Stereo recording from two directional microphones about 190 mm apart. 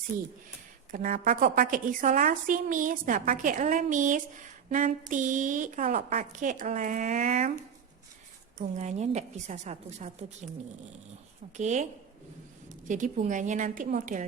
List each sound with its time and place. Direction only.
0.1 s speech: 15° right (ahead or behind)
0.9 s a woman's voice: 40° right (ahead or behind)
11.5 s a woman's voice: 40° right (ahead or behind)